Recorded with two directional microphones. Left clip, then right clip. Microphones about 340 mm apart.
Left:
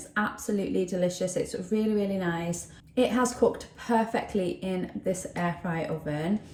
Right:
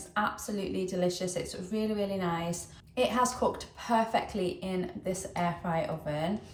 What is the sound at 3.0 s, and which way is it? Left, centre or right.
Speech, centre.